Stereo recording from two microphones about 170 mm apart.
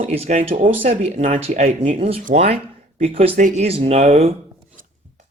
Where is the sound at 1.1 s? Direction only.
50° right (ahead or behind).